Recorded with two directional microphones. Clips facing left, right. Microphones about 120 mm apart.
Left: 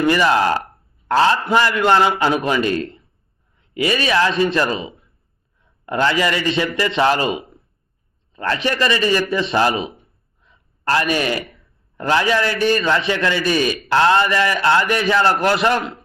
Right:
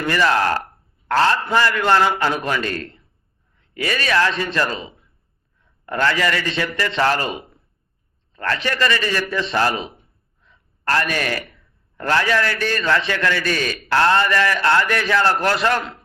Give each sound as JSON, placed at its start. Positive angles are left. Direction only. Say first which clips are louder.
{"t": 0.0, "sound": "a man's voice", "louder": "left 3 dB", "side_deg": 20}
{"t": 10.4, "sound": "gasp", "louder": "left 2 dB", "side_deg": 15}
{"t": 11.9, "sound": "a man's voice", "louder": "left 2 dB", "side_deg": 15}